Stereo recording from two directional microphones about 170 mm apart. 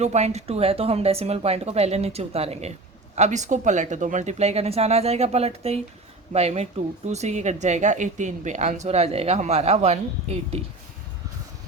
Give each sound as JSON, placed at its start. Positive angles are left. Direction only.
{"t": 0.0, "sound": "speech", "side_deg": -40}